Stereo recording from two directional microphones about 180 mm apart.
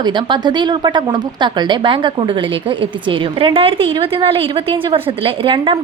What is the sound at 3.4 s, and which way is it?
A woman's voice, 30° right (ahead or behind).